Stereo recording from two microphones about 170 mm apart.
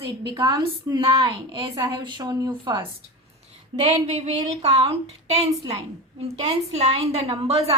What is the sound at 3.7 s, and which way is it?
A woman's voice, 40° right (ahead or behind).